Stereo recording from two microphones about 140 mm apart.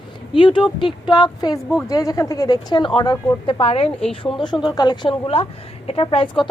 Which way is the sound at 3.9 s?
5° left (ahead or behind).